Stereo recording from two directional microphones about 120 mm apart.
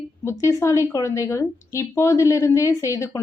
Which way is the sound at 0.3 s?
25° left (ahead or behind).